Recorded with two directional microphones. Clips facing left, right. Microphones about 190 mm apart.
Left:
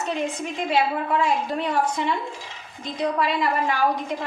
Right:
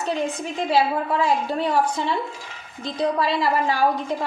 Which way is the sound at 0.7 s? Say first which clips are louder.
Right 2 dB; 35° right (ahead or behind).